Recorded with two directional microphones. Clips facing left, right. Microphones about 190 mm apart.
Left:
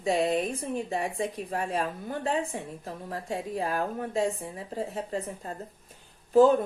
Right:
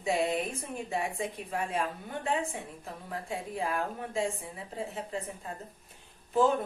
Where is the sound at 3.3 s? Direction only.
35° left (ahead or behind).